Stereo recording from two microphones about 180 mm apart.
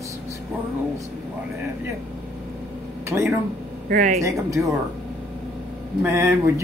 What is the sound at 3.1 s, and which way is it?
Speech, 15° right (ahead or behind).